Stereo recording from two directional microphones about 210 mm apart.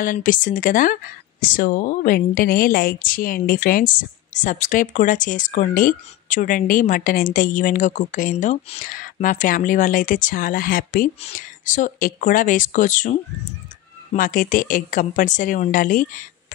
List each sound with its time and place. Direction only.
0.0 s a woman's voice: 40° left (ahead or behind)